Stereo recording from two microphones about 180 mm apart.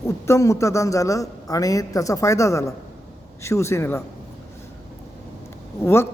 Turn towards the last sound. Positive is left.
turn(degrees=15)  # may be behind; listen again after turning